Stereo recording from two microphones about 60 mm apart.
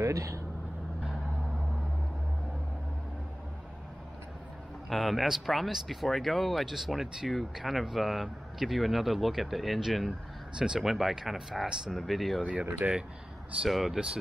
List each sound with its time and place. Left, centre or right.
0.0 s speech: right
4.8 s speech: centre
12.8 s speech: right
13.7 s speech: centre